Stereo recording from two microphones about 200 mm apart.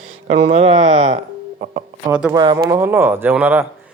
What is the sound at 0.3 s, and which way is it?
Speech, 30° right (ahead or behind).